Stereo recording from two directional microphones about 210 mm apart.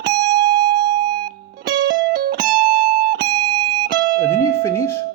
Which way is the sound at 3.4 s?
20° right (ahead or behind).